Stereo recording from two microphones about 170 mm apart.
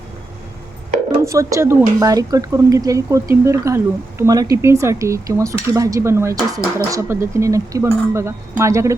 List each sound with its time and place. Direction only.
1.2 s speech: 20° right (ahead or behind)
4.2 s cutlery: 20° right (ahead or behind)